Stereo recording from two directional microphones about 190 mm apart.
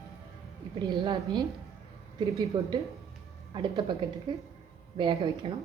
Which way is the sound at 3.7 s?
25° right (ahead or behind).